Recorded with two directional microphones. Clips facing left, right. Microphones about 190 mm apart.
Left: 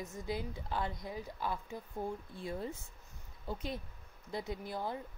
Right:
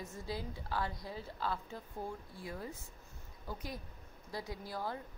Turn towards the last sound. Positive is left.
turn(degrees=20)  # may be behind; listen again after turning